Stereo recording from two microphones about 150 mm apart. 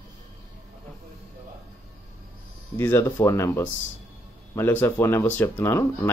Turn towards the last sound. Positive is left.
turn(degrees=15)  # may be behind; listen again after turning